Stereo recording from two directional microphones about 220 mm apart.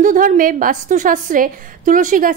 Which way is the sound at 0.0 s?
35° right (ahead or behind).